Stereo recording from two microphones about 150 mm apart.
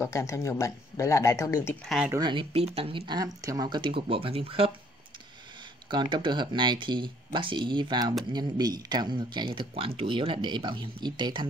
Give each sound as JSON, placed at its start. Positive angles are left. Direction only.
{"t": 0.0, "sound": "speech", "side_deg": 20}
{"t": 2.1, "sound": "speech", "side_deg": -30}
{"t": 5.9, "sound": "speech", "side_deg": -30}